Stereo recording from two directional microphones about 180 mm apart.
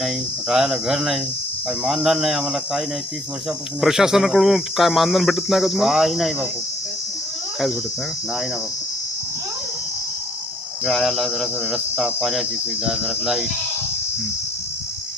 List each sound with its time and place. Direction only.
0.0 s speech: 5° right (ahead or behind)
10.8 s speech: centre (ahead or behind)